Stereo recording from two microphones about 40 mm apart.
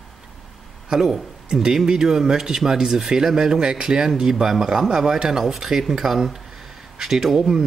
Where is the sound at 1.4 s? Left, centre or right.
Centre.